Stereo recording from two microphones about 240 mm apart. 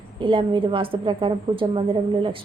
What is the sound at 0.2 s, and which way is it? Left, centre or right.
A woman's voice, right.